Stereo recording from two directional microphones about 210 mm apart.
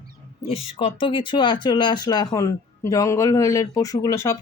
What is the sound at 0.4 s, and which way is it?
Speech, 25° left (ahead or behind).